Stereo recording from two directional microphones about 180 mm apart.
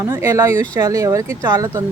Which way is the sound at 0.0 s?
15° right (ahead or behind).